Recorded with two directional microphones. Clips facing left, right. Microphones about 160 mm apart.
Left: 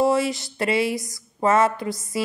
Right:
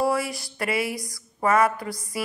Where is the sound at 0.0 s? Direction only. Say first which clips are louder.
Left 4 dB; 25° left (ahead or behind).